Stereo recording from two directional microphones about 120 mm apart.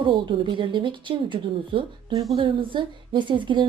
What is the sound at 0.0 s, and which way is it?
A woman's voice, 45° right (ahead or behind).